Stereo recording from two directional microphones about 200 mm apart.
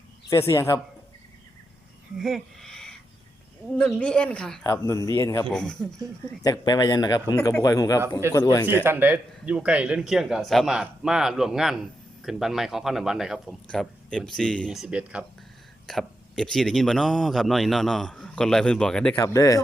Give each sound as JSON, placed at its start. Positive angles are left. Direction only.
{"t": 0.3, "sound": "speech", "side_deg": 15}
{"t": 2.1, "sound": "a sound", "side_deg": 0}
{"t": 3.7, "sound": "a man's voice", "side_deg": 5}
{"t": 4.7, "sound": "speech", "side_deg": 15}
{"t": 5.5, "sound": "a man's voice", "side_deg": 5}
{"t": 6.4, "sound": "a man's voice", "side_deg": 20}
{"t": 8.8, "sound": "a man's voice", "side_deg": -10}
{"t": 19.1, "sound": "speech", "side_deg": 15}